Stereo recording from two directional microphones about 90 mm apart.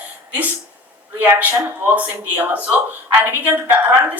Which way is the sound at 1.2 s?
20° right (ahead or behind).